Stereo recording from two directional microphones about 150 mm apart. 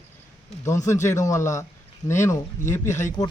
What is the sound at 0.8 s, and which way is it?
Speech, 55° left (ahead or behind).